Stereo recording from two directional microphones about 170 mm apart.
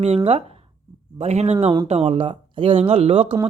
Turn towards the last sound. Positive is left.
turn(degrees=-35)  # may be behind; listen again after turning